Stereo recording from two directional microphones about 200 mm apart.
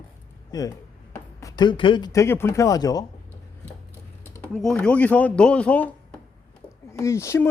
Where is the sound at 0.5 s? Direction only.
20° left (ahead or behind).